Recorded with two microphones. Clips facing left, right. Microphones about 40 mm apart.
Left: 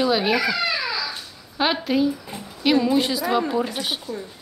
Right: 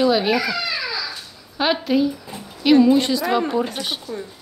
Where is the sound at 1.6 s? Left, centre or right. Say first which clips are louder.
Right 2 dB; centre.